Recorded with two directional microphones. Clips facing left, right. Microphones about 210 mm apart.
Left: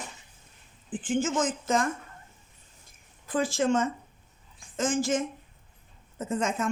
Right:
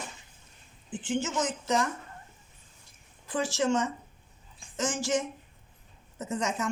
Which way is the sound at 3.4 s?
55° left (ahead or behind).